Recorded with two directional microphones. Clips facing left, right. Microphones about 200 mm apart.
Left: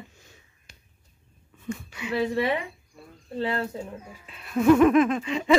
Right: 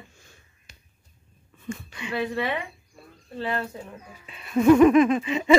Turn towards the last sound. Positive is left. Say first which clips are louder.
# right 3 dB
turn(degrees=-5)  # may be behind; listen again after turning